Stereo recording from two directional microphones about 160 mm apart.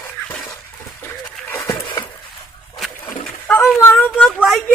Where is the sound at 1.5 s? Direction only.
20° left (ahead or behind).